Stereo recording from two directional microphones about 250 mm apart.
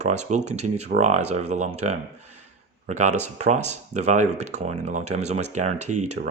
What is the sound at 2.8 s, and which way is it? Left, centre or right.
Speech, right.